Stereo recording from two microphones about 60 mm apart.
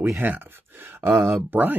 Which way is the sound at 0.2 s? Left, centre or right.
Right.